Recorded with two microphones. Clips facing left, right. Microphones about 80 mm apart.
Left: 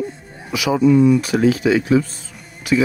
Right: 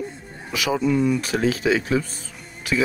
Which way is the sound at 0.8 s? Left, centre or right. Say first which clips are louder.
Left 9 dB; left.